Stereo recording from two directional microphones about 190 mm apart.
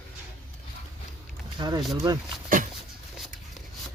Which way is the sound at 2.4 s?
45° right (ahead or behind).